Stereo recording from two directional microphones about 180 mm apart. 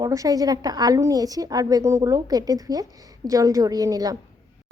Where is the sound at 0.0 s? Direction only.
20° right (ahead or behind).